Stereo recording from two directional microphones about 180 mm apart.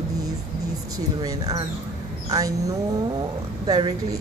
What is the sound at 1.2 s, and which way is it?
Speech, 20° right (ahead or behind).